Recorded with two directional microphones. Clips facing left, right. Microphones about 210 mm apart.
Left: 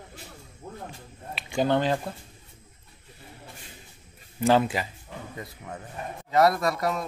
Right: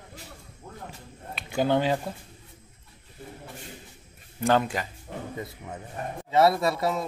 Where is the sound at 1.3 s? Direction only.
5° right (ahead or behind).